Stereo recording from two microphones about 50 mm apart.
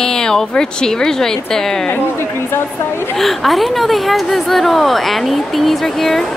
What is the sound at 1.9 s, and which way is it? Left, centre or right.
A woman's voice, left.